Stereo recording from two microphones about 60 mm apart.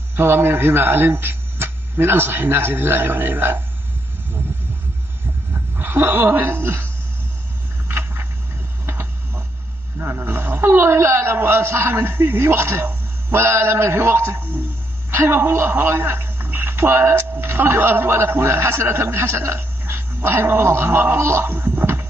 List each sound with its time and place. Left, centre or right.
0.1 s a man's voice: right
5.5 s speech: right
7.9 s a sound: right
9.9 s a man's voice: right
21.6 s music: right